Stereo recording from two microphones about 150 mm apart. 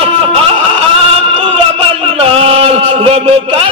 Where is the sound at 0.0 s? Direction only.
40° right (ahead or behind).